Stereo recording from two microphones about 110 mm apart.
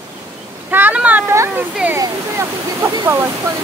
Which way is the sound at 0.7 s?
15° right (ahead or behind).